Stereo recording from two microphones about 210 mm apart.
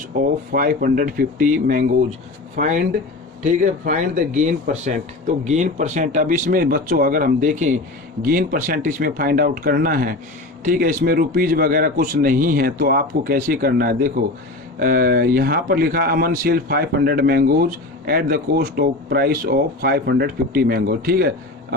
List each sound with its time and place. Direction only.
0.5 s a man's voice: 40° right (ahead or behind)